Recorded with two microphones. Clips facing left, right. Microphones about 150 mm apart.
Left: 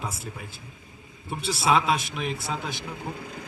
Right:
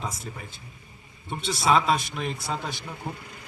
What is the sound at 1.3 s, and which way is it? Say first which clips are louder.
A man's voice: right 1 dB; 5° left (ahead or behind).